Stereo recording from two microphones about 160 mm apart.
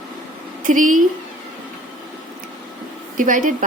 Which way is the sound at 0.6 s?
55° right (ahead or behind).